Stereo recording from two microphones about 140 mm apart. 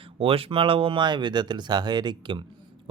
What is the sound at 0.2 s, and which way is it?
Speech, 40° right (ahead or behind).